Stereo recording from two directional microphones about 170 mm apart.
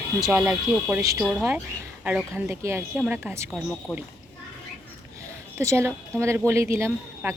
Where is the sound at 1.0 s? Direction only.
20° right (ahead or behind).